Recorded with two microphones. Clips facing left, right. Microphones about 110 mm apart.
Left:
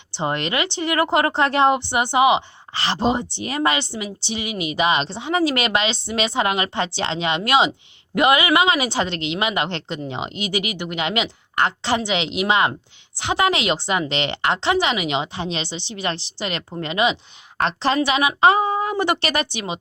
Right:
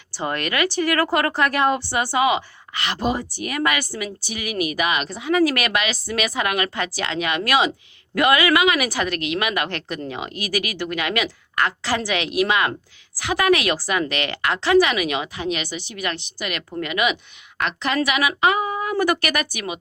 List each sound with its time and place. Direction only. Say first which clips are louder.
0.1 s a woman's voice: left 2 dB; 25° left (ahead or behind)